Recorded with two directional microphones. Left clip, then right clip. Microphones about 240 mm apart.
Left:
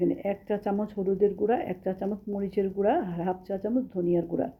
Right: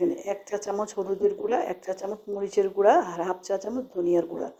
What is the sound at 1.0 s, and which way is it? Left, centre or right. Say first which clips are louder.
Speech: left 1 dB; right.